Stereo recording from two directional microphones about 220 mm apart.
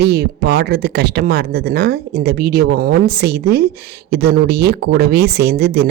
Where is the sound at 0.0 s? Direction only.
50° right (ahead or behind).